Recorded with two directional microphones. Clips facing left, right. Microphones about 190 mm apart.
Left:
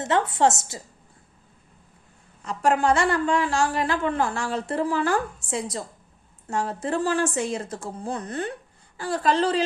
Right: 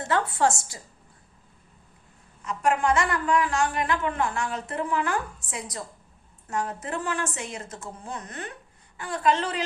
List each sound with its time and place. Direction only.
0.0 s a woman's voice: 20° left (ahead or behind)
2.4 s a woman's voice: 30° left (ahead or behind)